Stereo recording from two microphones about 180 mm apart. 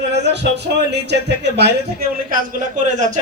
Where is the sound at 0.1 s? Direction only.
70° right (ahead or behind).